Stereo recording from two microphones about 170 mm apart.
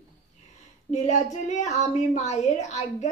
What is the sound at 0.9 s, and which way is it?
A woman's voice, 45° left (ahead or behind).